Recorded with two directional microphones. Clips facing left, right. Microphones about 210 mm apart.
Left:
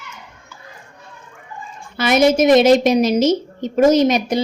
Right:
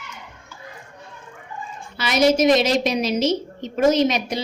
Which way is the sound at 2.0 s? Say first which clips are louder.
Left 4 dB; 50° left (ahead or behind).